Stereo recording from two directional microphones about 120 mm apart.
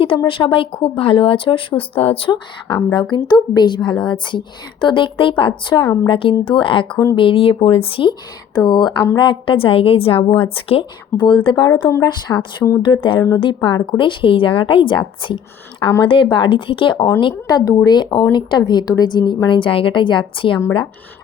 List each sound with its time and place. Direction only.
0.3 s speech: 45° left (ahead or behind)
8.5 s speech: 35° left (ahead or behind)
13.1 s speech: 25° left (ahead or behind)
13.4 s speech: 40° left (ahead or behind)